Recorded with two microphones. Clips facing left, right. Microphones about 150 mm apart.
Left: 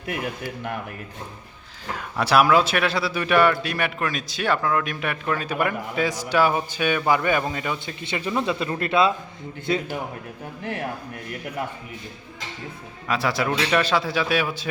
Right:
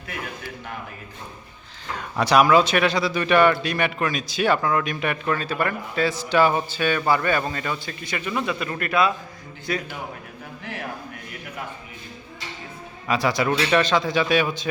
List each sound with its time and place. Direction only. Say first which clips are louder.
2.1 s a man's voice: right 1 dB; 5° left (ahead or behind)
5.5 s a man's voice: left 1 dB; 15° left (ahead or behind)
8.0 s speech: left 2 dB; 25° left (ahead or behind)
13.1 s a man's voice: right 2 dB; centre (ahead or behind)